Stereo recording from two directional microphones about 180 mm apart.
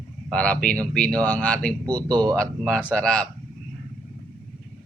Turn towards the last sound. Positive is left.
turn(degrees=5)  # may be behind; listen again after turning